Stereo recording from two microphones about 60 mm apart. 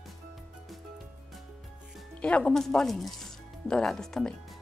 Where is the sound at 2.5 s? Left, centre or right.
Centre.